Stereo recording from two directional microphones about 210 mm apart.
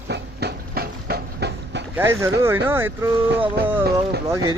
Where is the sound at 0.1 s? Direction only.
50° right (ahead or behind).